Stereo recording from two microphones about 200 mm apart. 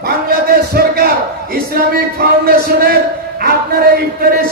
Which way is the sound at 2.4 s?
50° right (ahead or behind).